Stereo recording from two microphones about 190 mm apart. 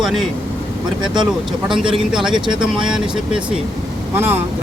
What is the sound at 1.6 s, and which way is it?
Speech, centre (ahead or behind).